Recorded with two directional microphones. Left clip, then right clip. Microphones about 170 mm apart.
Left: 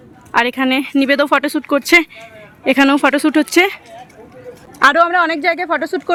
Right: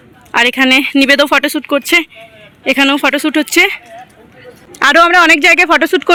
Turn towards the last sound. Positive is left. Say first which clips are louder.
# right 8 dB
turn(degrees=-35)  # may be behind; listen again after turning